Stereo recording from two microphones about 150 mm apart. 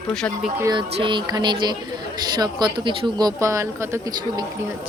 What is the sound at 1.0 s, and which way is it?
Speech, 30° right (ahead or behind).